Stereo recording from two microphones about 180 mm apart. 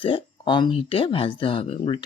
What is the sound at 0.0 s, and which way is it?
Speech, 25° left (ahead or behind).